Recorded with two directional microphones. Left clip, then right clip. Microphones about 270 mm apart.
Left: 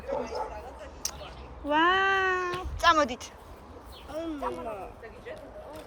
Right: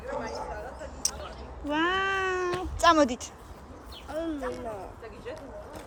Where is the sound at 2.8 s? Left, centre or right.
Centre.